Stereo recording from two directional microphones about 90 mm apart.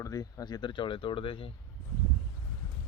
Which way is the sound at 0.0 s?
40° left (ahead or behind).